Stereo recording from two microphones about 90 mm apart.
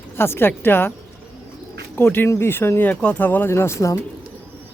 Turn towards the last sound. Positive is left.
turn(degrees=35)  # may be behind; listen again after turning